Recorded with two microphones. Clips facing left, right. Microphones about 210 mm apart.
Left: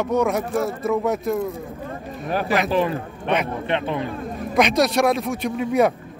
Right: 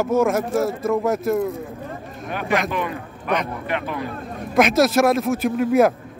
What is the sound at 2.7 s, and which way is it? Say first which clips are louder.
A man's voice: left 5 dB; 30° left (ahead or behind).